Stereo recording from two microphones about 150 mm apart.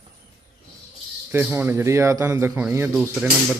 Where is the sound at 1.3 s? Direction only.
15° right (ahead or behind).